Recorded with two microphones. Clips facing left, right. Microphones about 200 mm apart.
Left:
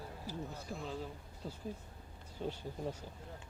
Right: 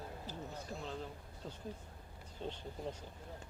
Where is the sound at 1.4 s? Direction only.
5° left (ahead or behind).